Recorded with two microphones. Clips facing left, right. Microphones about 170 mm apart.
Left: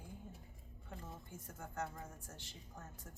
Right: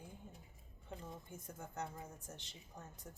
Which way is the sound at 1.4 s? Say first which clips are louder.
Left 2 dB; 20° right (ahead or behind).